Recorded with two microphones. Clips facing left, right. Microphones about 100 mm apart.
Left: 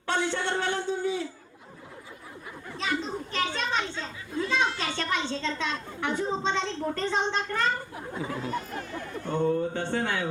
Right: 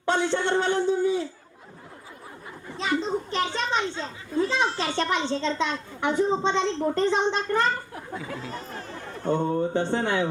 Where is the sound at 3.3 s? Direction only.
25° right (ahead or behind).